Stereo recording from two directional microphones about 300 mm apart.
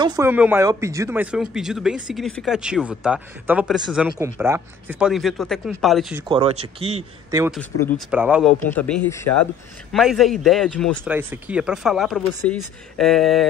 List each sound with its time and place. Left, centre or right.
0.0 s a man's voice: centre
6.2 s a man's voice: centre